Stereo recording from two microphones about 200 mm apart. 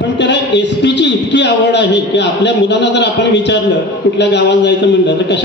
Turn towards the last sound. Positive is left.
turn(degrees=60)  # may be behind; listen again after turning